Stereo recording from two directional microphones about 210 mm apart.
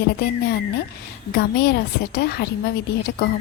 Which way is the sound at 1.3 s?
50° left (ahead or behind).